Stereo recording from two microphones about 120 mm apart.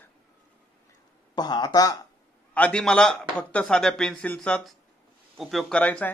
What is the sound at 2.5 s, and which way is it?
Speech, 10° left (ahead or behind).